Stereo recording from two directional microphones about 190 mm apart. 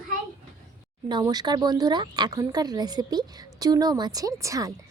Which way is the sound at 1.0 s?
20° right (ahead or behind).